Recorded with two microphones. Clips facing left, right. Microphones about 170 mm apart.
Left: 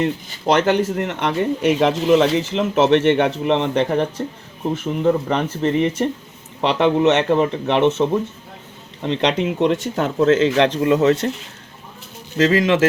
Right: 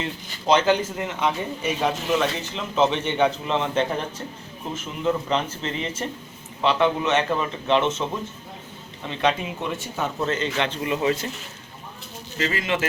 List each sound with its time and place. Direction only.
0.4 s speech: 65° left (ahead or behind)
4.7 s a man's voice: 60° left (ahead or behind); by 10.8 s 90° left
10.8 s speech: 65° left (ahead or behind)
12.4 s speech: 90° left